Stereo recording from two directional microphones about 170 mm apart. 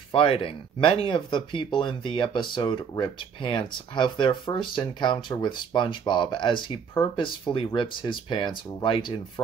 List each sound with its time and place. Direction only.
0.1 s speech: 35° left (ahead or behind)